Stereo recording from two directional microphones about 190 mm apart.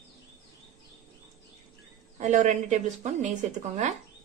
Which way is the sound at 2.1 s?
40° right (ahead or behind).